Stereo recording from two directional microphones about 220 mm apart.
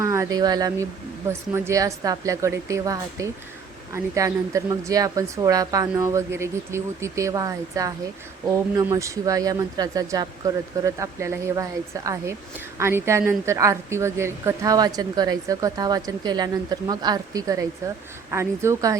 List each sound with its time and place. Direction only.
0.0 s speech: 15° right (ahead or behind)